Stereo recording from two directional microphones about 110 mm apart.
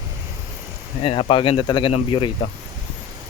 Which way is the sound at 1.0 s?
55° left (ahead or behind).